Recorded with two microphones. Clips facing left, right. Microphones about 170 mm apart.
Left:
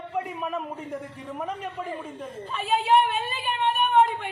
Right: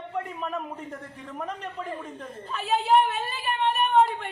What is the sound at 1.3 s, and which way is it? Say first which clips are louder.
A man's voice: left 1 dB; 5° left (ahead or behind).